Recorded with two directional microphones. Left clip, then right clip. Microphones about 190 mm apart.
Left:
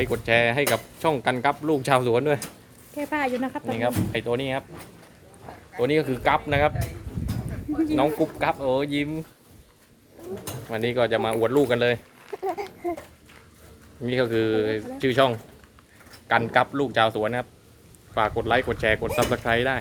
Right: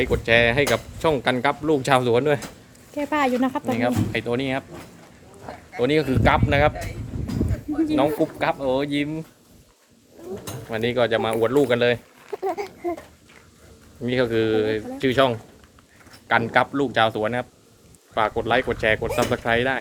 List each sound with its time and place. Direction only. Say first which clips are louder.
0.0 s speech: right 3 dB; 5° right (ahead or behind)
2.9 s speech: right 4 dB; 25° right (ahead or behind)
3.8 s speech: right 2 dB; centre (ahead or behind)
5.7 s speech: right 2 dB; 5° right (ahead or behind)
8.2 s speech: right 1 dB; 5° right (ahead or behind)
10.7 s speech: right 2 dB; 5° right (ahead or behind)
12.3 s a sound: right 3 dB; 20° right (ahead or behind)
14.0 s speech: right 2 dB; 5° right (ahead or behind)